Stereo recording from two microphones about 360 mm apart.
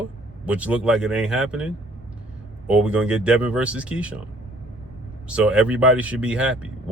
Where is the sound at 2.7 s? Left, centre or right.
Centre.